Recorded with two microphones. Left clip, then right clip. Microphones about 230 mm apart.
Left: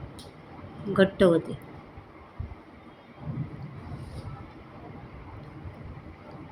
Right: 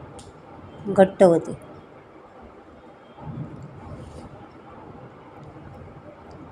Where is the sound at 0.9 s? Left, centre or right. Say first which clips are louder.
Right 6 dB; centre.